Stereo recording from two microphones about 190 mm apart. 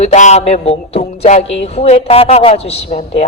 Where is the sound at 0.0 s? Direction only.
35° left (ahead or behind).